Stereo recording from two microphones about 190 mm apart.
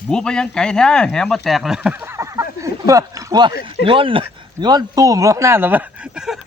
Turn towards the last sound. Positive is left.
turn(degrees=-5)  # may be behind; listen again after turning